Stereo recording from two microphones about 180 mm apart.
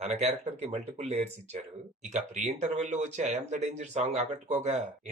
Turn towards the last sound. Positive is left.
turn(degrees=-40)  # may be behind; listen again after turning